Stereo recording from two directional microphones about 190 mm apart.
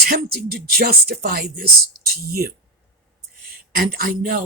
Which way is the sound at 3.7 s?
55° right (ahead or behind).